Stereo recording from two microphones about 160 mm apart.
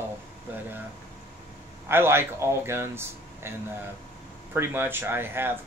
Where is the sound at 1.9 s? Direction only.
15° right (ahead or behind).